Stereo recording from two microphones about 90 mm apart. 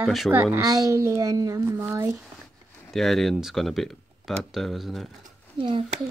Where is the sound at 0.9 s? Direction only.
35° right (ahead or behind).